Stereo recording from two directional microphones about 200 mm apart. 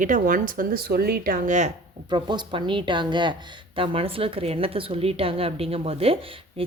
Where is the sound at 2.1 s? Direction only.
20° right (ahead or behind).